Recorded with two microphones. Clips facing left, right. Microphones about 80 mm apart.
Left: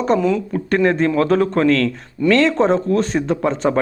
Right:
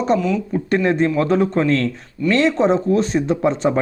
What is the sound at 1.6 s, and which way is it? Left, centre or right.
Speech, left.